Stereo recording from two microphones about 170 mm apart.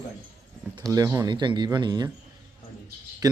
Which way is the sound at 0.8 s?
20° right (ahead or behind).